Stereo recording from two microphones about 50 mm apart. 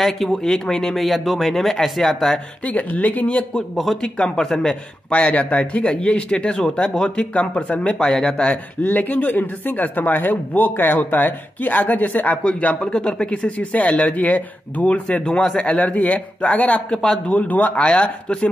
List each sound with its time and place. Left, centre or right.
0.0 s speech: centre
2.6 s speech: left
3.7 s speech: centre
4.4 s speech: centre
5.1 s speech: left
8.1 s speech: centre
8.8 s speech: left
12.4 s speech: left
15.8 s speech: left